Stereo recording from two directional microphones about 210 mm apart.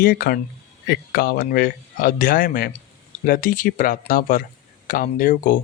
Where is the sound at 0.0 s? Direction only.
45° left (ahead or behind).